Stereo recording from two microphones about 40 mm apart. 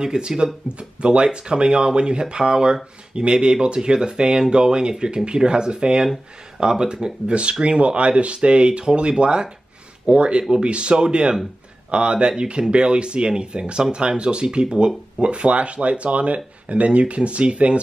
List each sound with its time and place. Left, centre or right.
0.0 s speech: centre